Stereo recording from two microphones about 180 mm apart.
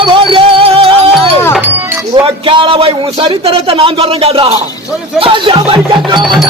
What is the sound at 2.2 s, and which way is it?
A man's voice, 30° right (ahead or behind).